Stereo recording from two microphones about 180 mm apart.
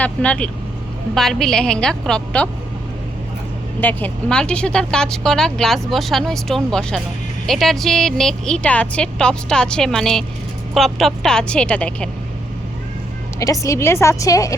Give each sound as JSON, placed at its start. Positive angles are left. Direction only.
{"t": 0.0, "sound": "a woman's voice", "side_deg": 5}
{"t": 3.8, "sound": "a woman's voice", "side_deg": 10}
{"t": 13.4, "sound": "a woman's voice", "side_deg": 15}